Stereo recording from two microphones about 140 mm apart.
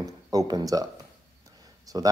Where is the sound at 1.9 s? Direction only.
30° right (ahead or behind).